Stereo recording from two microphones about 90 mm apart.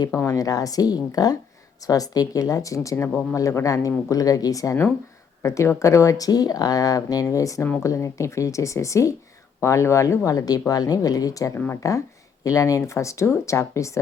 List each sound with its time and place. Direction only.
0.3 s a woman's voice: 40° left (ahead or behind)
11.5 s speech: 30° left (ahead or behind)